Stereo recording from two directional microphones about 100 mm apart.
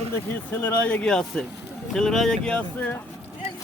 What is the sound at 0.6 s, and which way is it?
Speech, 20° left (ahead or behind).